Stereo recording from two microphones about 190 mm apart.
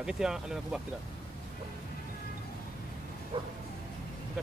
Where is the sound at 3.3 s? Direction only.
25° right (ahead or behind).